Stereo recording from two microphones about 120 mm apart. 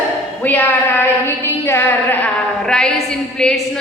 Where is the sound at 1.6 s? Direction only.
20° left (ahead or behind).